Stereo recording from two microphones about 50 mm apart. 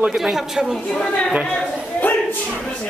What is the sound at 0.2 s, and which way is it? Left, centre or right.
Speech, centre.